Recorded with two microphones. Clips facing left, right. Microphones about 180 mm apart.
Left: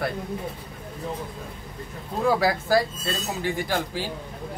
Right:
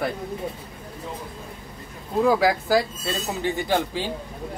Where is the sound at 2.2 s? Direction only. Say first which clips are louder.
Right 2 dB; 15° right (ahead or behind).